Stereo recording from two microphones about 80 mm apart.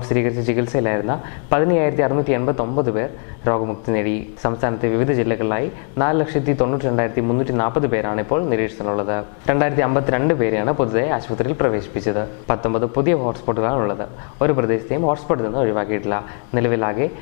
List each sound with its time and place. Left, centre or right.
0.1 s speech: centre